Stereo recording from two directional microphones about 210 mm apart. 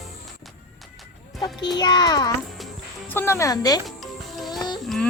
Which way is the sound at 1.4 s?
20° left (ahead or behind).